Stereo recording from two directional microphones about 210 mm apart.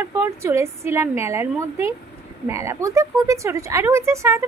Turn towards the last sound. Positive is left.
turn(degrees=-15)  # may be behind; listen again after turning